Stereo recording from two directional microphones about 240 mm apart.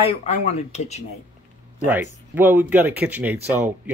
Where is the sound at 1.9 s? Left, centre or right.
Centre.